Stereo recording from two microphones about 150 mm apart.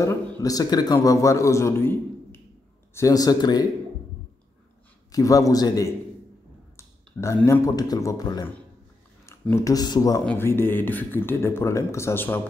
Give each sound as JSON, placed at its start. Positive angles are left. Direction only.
{"t": 0.0, "sound": "a man's voice", "side_deg": 20}
{"t": 5.1, "sound": "a man's voice", "side_deg": 20}
{"t": 6.8, "sound": "a sound", "side_deg": 20}
{"t": 7.4, "sound": "a man's voice", "side_deg": 20}
{"t": 10.2, "sound": "speech", "side_deg": 15}